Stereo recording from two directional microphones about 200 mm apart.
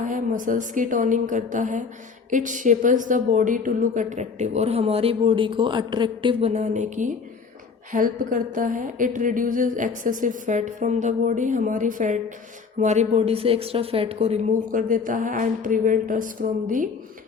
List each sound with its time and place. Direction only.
0.0 s speech: 40° right (ahead or behind)